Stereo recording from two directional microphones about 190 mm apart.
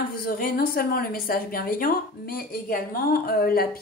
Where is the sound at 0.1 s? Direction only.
50° left (ahead or behind).